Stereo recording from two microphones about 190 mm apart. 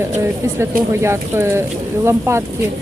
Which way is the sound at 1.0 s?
15° right (ahead or behind).